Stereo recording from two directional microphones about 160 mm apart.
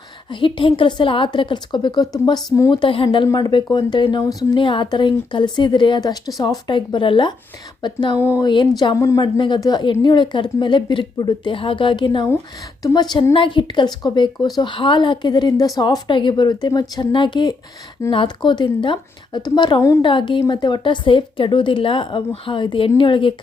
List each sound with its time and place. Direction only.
0.3 s a woman's voice: 30° left (ahead or behind)
8.2 s a woman's voice: 15° left (ahead or behind); by 23.3 s 30° left (ahead or behind)